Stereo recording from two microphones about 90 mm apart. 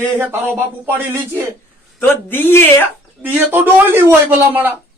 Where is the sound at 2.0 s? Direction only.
25° left (ahead or behind).